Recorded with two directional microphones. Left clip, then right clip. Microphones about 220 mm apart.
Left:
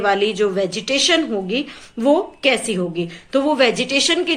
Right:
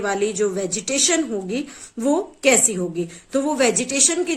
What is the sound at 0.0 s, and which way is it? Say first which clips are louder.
A woman's voice: left 4 dB; 40° right (ahead or behind).